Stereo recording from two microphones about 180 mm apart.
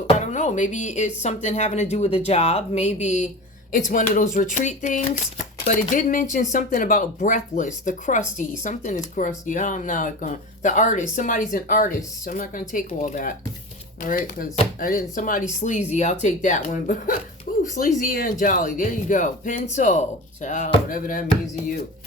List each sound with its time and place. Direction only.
0.2 s speech: 40° left (ahead or behind)